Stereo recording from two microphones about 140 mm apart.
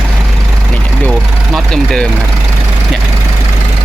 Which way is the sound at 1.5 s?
5° left (ahead or behind).